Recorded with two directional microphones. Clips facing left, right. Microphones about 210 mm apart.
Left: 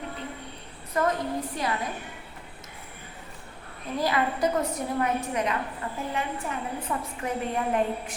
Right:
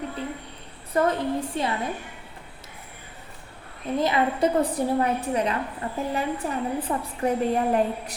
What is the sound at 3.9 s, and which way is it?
A woman's voice, 25° right (ahead or behind).